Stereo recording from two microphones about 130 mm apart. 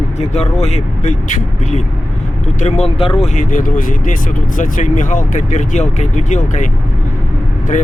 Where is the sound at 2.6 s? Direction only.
50° left (ahead or behind).